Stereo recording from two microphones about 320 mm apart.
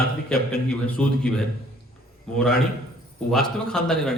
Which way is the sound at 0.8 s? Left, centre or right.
Centre.